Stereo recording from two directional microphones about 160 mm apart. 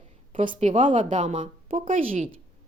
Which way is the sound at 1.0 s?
45° right (ahead or behind).